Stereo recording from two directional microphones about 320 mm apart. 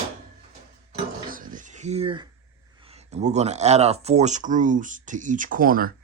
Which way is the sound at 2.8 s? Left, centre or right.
Centre.